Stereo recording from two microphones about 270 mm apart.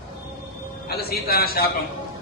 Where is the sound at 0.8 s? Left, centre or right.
Left.